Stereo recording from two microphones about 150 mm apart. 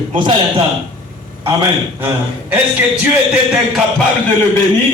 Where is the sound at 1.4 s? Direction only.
20° right (ahead or behind).